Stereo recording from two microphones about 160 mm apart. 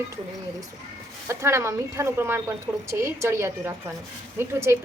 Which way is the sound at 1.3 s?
15° right (ahead or behind).